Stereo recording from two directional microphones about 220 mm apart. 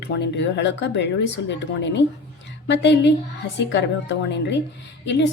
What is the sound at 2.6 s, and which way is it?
A woman's voice, 55° left (ahead or behind).